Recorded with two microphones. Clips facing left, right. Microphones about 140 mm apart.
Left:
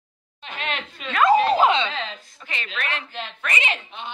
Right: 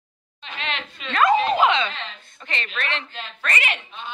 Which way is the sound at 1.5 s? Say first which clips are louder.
Left 1 dB; 35° left (ahead or behind).